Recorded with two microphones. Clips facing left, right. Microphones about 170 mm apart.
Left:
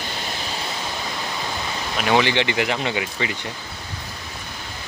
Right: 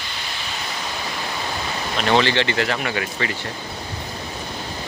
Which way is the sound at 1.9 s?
10° left (ahead or behind).